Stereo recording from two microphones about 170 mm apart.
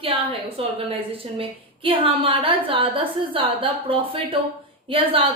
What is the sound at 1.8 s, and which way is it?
A woman's voice, 30° right (ahead or behind).